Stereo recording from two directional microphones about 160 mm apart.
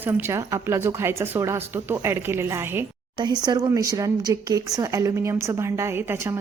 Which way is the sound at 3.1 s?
25° right (ahead or behind).